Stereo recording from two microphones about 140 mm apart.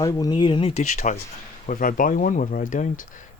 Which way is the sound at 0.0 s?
25° left (ahead or behind).